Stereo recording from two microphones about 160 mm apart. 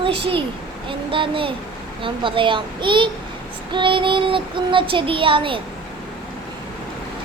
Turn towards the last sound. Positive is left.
turn(degrees=-35)  # may be behind; listen again after turning